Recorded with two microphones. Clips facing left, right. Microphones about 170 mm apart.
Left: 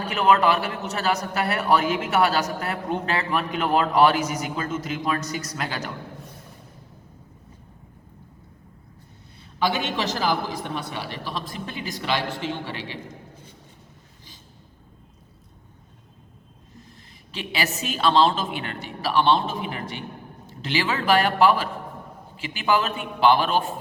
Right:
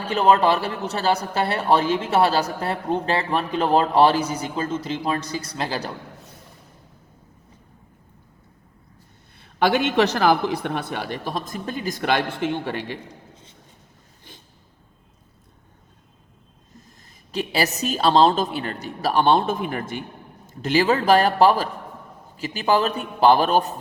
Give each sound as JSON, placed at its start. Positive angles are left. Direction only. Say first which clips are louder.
{"t": 0.1, "sound": "a man's voice", "louder": "right 2 dB", "side_deg": -30}
{"t": 9.4, "sound": "a man's voice", "louder": "right 5 dB", "side_deg": -55}
{"t": 17.3, "sound": "a man's voice", "louder": "right 5 dB", "side_deg": -40}